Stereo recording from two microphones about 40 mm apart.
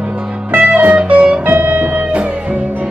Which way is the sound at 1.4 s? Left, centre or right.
Right.